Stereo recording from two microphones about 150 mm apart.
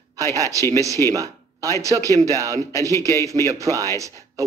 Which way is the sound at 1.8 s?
20° right (ahead or behind).